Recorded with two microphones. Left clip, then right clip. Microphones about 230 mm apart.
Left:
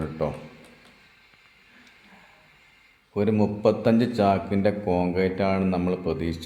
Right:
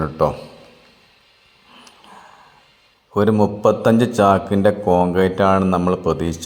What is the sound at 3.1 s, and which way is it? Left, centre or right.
A man's voice, right.